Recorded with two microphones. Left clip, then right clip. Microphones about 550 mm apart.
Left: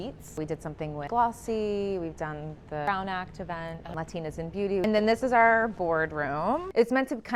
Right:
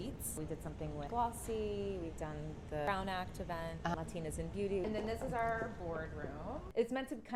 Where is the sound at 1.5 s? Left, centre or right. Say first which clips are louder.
Left 10 dB; left.